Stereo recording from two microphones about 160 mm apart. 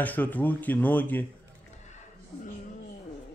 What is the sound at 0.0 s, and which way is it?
Speech, 10° left (ahead or behind).